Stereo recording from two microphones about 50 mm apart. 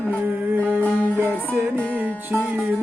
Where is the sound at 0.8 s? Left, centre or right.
Left.